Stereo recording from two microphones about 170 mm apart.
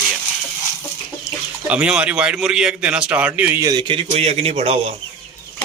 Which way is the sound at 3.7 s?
25° right (ahead or behind).